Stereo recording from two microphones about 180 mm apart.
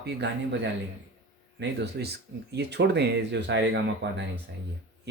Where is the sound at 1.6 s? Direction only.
70° right (ahead or behind).